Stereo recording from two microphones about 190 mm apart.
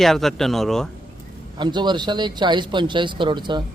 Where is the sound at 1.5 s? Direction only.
25° right (ahead or behind).